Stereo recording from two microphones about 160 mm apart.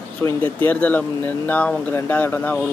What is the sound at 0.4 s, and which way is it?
Speech, 10° left (ahead or behind).